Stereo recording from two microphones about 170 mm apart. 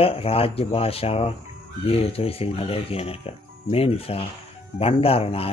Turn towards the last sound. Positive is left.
turn(degrees=35)  # may be behind; listen again after turning